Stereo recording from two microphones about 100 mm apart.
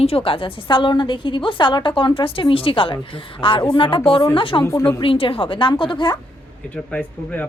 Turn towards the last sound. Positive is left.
turn(degrees=15)  # may be behind; listen again after turning